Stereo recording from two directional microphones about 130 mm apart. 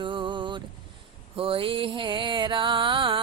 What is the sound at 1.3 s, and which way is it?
Music, 45° right (ahead or behind).